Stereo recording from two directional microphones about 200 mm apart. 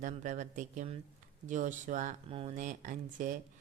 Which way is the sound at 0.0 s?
40° right (ahead or behind).